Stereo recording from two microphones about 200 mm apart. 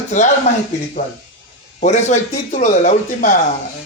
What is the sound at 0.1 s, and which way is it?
Speech, 35° left (ahead or behind).